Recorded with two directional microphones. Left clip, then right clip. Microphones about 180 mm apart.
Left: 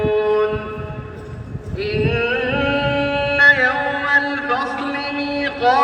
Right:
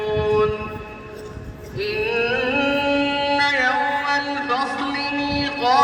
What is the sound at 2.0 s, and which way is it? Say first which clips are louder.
Music: even; 15° right (ahead or behind).